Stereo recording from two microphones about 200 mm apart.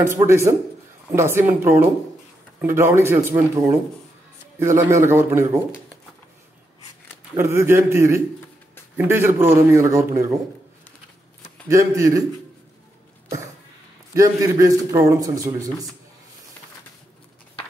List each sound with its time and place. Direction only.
0.0 s a man's voice: 15° right (ahead or behind)
7.3 s a man's voice: 10° right (ahead or behind)
11.7 s a man's voice: 15° right (ahead or behind)
14.1 s a man's voice: 15° right (ahead or behind)